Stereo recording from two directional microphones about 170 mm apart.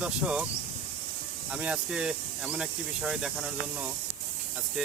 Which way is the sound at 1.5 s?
5° right (ahead or behind).